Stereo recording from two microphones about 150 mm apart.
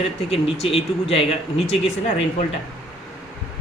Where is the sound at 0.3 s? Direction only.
40° left (ahead or behind).